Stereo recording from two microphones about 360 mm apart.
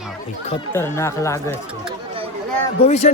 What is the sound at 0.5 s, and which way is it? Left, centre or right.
Speech, centre.